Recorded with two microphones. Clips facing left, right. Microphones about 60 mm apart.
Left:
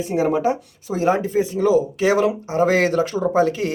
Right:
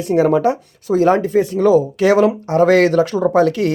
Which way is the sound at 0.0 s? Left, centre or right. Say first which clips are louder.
Right 5 dB; right.